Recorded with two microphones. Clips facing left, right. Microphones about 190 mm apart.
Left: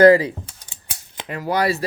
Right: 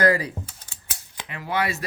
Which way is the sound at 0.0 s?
25° left (ahead or behind).